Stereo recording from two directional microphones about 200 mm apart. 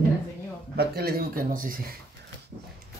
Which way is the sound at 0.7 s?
50° right (ahead or behind).